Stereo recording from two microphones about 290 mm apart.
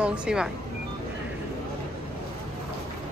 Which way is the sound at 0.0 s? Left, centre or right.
Centre.